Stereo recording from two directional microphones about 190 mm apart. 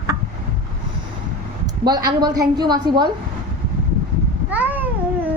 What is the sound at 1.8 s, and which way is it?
A woman's voice, 20° right (ahead or behind).